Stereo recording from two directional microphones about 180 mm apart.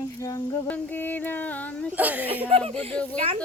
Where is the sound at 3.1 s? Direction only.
40° right (ahead or behind).